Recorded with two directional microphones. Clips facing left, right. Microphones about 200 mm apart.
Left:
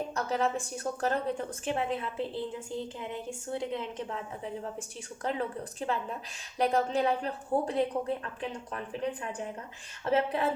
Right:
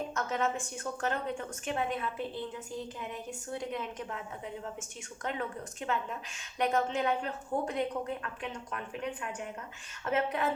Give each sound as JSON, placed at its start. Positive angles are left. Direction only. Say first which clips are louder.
{"t": 0.1, "sound": "a woman's voice", "louder": "left 4 dB", "side_deg": 35}